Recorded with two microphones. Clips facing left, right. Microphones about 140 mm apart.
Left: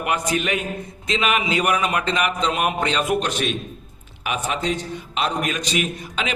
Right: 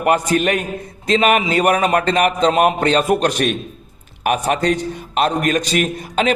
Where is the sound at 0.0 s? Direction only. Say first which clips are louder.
Right 7 dB; 45° right (ahead or behind).